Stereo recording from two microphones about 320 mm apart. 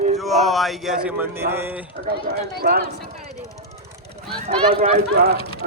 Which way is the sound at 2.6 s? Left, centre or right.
Right.